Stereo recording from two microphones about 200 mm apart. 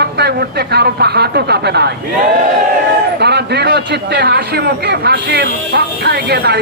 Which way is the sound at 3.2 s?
55° right (ahead or behind).